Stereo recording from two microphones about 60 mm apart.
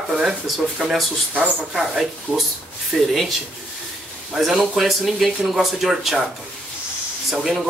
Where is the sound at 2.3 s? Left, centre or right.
Centre.